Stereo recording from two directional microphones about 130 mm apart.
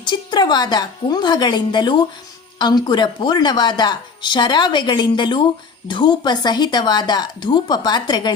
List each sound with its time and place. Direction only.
0.0 s speech: 35° left (ahead or behind)